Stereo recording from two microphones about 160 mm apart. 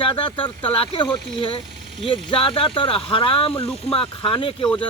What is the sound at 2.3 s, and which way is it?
Speech, 35° left (ahead or behind).